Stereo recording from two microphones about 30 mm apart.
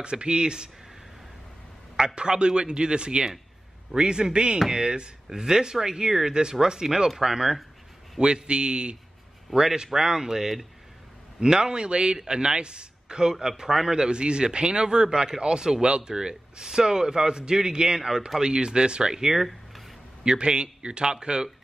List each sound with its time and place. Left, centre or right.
0.0 s speech: right
2.1 s speech: right
8.2 s speech: right
9.5 s speech: centre
13.9 s speech: right
19.1 s speech: centre
20.2 s speech: right